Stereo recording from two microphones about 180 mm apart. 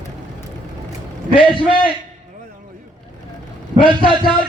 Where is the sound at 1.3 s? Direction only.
30° left (ahead or behind).